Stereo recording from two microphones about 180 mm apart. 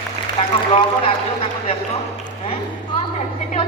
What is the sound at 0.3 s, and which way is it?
Speech, 30° left (ahead or behind).